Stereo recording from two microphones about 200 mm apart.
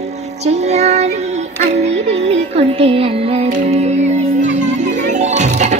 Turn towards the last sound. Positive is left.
turn(degrees=-35)  # may be behind; listen again after turning